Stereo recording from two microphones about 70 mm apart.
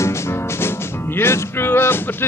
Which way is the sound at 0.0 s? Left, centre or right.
Left.